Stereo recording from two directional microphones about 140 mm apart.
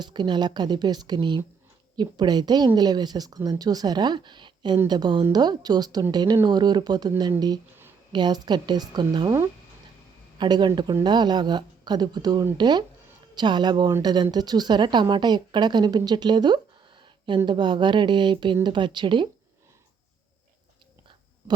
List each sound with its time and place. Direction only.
0.0 s speech: 30° right (ahead or behind)